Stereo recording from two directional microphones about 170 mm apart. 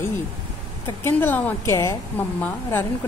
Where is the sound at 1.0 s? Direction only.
15° left (ahead or behind).